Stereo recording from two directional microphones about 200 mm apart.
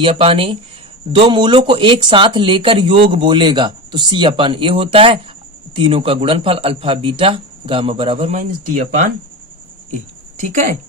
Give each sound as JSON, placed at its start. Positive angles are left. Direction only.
{"t": 0.0, "sound": "speech", "side_deg": -30}